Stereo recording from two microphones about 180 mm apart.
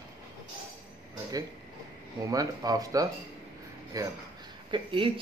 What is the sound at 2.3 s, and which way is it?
A man's voice, 20° right (ahead or behind).